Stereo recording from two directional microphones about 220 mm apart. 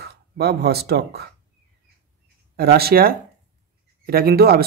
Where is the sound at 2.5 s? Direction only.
45° right (ahead or behind).